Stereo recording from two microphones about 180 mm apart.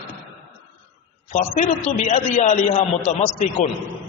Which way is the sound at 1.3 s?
40° left (ahead or behind).